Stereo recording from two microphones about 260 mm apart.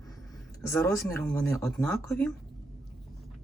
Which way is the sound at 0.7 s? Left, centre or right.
Centre.